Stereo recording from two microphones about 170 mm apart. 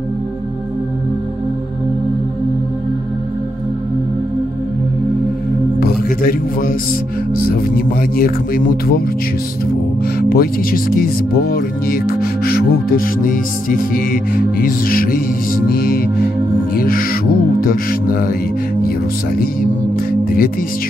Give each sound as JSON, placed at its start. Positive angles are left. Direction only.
{"t": 5.8, "sound": "music", "side_deg": 60}
{"t": 7.4, "sound": "speech", "side_deg": 60}
{"t": 10.3, "sound": "speech", "side_deg": 60}
{"t": 16.7, "sound": "music", "side_deg": 60}